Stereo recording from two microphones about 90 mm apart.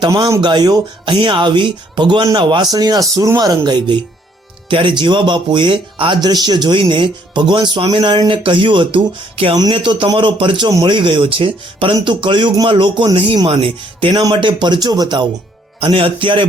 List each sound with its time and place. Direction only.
0.1 s speech: 40° right (ahead or behind)
0.4 s speech: 55° right (ahead or behind)
4.7 s speech: 70° right (ahead or behind); by 9.6 s 90° right
9.7 s speech: 65° right (ahead or behind)
13.5 s speech: 85° right; by 14.3 s 65° right (ahead or behind)
14.4 s speech: 55° right (ahead or behind)
15.8 s speech: 90° right